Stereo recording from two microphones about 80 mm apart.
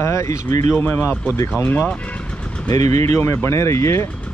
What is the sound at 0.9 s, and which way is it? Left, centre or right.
Speech, left.